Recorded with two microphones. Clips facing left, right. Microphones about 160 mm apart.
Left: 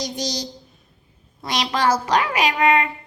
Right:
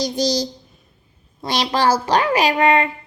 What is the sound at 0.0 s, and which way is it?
A woman's voice, 35° right (ahead or behind).